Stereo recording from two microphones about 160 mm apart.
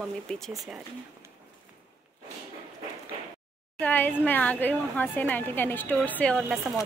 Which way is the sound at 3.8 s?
10° left (ahead or behind).